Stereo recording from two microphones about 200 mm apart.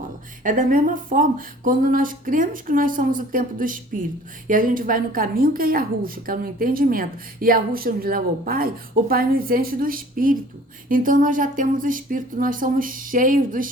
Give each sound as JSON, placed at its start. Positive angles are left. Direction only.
{"t": 0.4, "sound": "a woman's voice", "side_deg": -40}